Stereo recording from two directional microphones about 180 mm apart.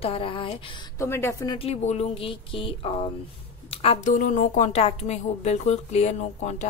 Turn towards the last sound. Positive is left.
turn(degrees=40)  # may be behind; listen again after turning